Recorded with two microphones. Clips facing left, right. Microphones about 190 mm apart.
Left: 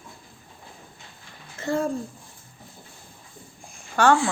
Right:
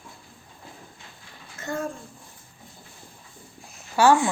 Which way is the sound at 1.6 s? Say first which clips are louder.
Left 5 dB; 30° left (ahead or behind).